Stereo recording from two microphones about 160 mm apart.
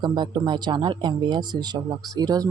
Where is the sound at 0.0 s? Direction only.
25° right (ahead or behind).